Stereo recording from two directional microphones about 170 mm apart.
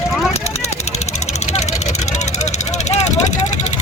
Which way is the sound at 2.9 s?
40° left (ahead or behind).